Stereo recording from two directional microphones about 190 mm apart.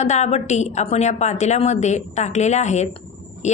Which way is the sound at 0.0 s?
35° left (ahead or behind).